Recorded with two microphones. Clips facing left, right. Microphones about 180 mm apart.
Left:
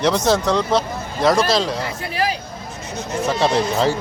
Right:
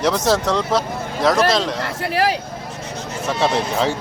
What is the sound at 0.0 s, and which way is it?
Speech, centre (ahead or behind).